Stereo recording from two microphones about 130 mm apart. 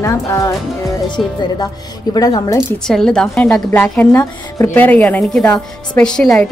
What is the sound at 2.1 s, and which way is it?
Speech, 30° left (ahead or behind).